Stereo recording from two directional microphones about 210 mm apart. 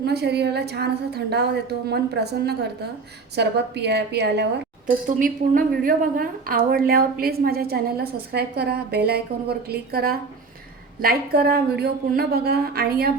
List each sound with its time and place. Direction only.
0.0 s a woman's voice: 50° right (ahead or behind)
5.0 s a woman's voice: 40° right (ahead or behind)